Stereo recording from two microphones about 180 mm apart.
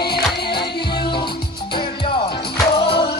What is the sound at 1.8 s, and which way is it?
Music, 25° left (ahead or behind).